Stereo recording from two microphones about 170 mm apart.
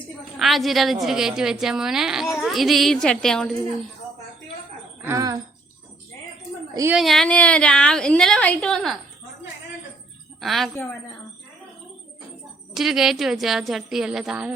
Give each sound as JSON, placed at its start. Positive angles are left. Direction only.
{"t": 0.3, "sound": "a woman's voice", "side_deg": 0}
{"t": 5.0, "sound": "speech", "side_deg": -20}
{"t": 6.9, "sound": "a woman's voice", "side_deg": 0}
{"t": 10.4, "sound": "a woman's voice", "side_deg": 0}
{"t": 12.7, "sound": "a woman's voice", "side_deg": 0}